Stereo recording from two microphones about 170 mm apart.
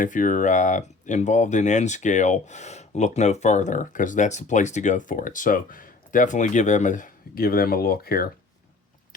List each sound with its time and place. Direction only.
0.0 s speech: 50° left (ahead or behind)